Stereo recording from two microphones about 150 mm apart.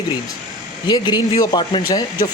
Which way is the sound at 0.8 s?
30° left (ahead or behind).